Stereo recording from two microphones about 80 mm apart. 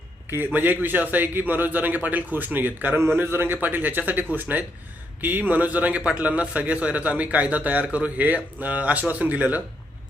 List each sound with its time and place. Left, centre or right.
0.3 s a man's voice: right